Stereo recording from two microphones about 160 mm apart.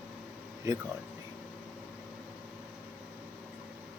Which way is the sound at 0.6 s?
20° right (ahead or behind).